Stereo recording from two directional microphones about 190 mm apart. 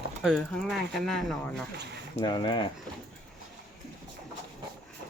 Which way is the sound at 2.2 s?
25° left (ahead or behind).